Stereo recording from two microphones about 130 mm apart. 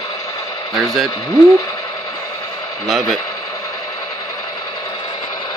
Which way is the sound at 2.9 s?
Centre (ahead or behind).